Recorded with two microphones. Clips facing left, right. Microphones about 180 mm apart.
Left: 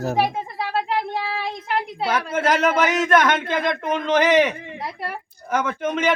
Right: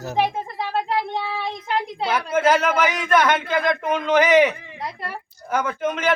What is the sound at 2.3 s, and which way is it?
Speech, 10° right (ahead or behind).